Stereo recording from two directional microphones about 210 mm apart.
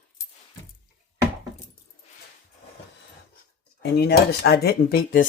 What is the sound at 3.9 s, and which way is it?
Speech, 50° left (ahead or behind).